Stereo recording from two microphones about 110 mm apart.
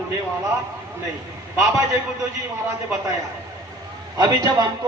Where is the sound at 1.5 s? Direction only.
25° right (ahead or behind).